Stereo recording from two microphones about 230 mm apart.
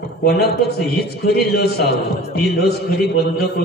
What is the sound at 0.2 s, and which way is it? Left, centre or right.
A man's voice, left.